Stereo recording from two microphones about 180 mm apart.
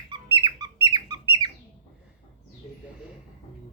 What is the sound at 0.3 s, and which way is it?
Squeak, 25° right (ahead or behind).